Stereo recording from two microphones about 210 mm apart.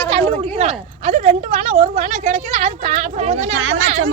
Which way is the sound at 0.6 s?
30° right (ahead or behind).